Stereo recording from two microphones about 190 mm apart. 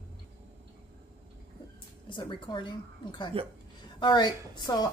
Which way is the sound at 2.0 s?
25° left (ahead or behind).